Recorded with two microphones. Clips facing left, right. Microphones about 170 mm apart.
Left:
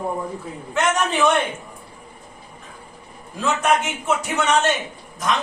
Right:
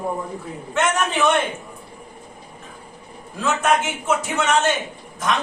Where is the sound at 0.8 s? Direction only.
Centre (ahead or behind).